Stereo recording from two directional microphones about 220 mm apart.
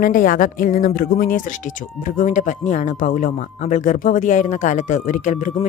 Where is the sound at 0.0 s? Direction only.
40° left (ahead or behind).